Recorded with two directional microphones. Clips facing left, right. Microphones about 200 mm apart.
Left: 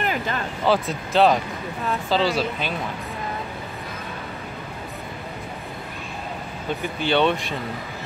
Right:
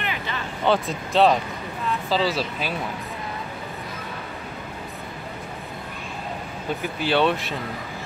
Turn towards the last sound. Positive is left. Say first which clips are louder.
# left 1 dB
turn(degrees=0)  # may be behind; listen again after turning